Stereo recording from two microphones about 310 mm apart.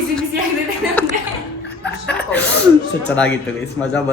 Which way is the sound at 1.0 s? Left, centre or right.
Centre.